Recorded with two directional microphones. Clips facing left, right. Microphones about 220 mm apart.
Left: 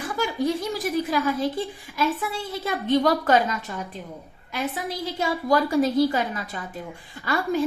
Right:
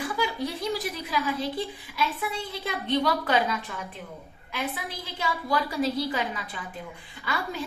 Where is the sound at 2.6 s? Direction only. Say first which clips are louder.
Left 5 dB; 45° left (ahead or behind).